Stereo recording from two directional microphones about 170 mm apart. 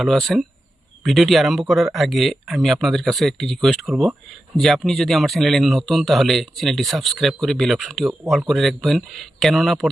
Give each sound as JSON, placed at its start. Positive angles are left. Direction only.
{"t": 0.0, "sound": "speech", "side_deg": 0}